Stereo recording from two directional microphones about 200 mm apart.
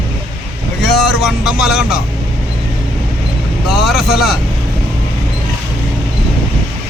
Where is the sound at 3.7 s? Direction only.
Centre (ahead or behind).